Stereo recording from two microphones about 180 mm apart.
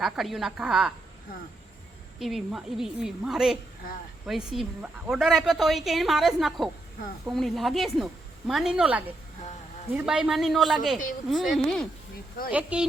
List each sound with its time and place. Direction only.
0.0 s a woman's voice: centre (ahead or behind)
2.1 s a woman's voice: centre (ahead or behind)